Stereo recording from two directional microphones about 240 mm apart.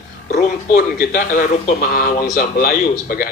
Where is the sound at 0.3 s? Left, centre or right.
Left.